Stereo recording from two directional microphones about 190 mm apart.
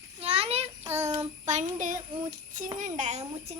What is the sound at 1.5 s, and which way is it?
Child singing, 40° right (ahead or behind).